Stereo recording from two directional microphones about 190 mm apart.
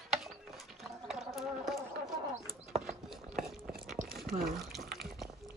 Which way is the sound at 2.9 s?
Centre (ahead or behind).